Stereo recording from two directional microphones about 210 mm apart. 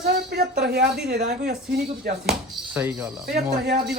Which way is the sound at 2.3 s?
5° right (ahead or behind).